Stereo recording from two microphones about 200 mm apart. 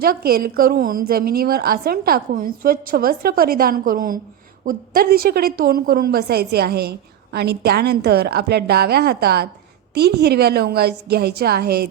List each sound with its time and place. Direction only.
0.0 s a woman's voice: 50° right (ahead or behind)